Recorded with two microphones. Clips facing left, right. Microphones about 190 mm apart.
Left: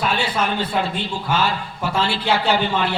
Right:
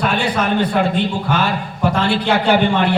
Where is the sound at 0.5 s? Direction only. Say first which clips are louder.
Right 6 dB; 55° right (ahead or behind).